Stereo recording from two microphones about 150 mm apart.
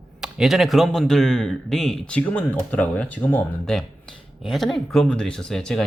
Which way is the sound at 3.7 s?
Centre (ahead or behind).